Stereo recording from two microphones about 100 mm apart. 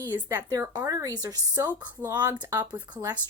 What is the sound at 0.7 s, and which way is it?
A woman's voice, 40° right (ahead or behind).